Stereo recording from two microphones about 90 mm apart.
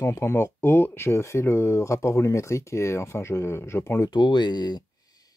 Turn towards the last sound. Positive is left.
turn(degrees=50)  # may be behind; listen again after turning